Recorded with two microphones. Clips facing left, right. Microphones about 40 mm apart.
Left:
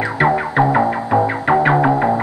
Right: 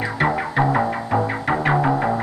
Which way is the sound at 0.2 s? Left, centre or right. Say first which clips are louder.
Left 5 dB; centre.